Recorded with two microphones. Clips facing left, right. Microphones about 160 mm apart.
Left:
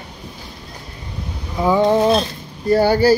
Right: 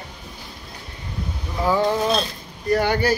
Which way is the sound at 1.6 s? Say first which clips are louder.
Left 5 dB; 20° left (ahead or behind).